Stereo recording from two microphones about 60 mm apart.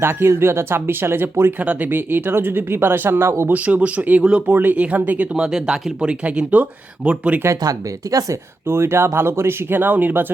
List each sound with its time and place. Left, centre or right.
0.0 s speech: right
3.5 s speech: right
4.4 s speech: right
5.3 s speech: centre
7.4 s speech: right
8.6 s speech: right